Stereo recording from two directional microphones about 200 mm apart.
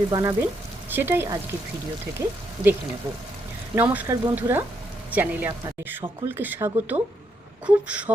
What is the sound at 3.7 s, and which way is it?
Speech, 10° right (ahead or behind).